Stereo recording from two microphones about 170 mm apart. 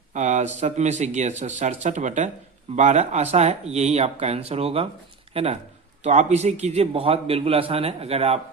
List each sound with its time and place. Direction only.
0.1 s a man's voice: 45° right (ahead or behind)